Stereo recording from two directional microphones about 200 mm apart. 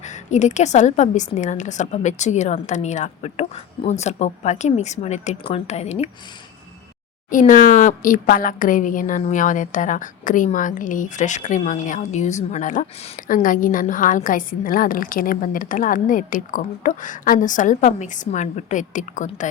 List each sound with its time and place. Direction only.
0.0 s a woman's voice: 35° left (ahead or behind)
7.3 s a woman's voice: 40° left (ahead or behind)